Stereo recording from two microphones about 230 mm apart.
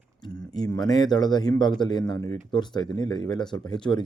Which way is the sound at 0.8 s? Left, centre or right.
Centre.